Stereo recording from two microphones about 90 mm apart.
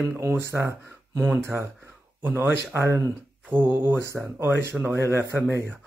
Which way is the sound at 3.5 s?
20° right (ahead or behind).